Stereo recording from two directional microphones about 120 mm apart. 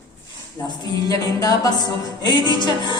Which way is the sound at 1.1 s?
30° left (ahead or behind).